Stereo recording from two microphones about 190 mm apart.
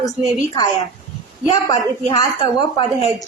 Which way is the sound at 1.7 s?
20° left (ahead or behind).